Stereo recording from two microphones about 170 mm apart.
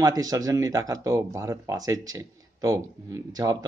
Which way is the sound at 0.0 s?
20° right (ahead or behind).